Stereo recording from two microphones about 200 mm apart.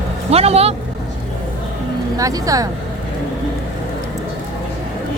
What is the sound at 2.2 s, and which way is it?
Speech, 15° right (ahead or behind).